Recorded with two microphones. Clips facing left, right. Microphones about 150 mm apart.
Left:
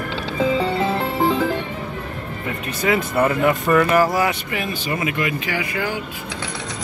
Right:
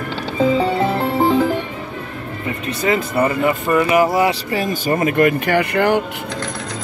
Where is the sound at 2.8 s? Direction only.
Centre (ahead or behind).